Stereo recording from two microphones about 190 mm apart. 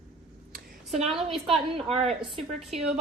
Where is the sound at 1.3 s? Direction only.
30° right (ahead or behind).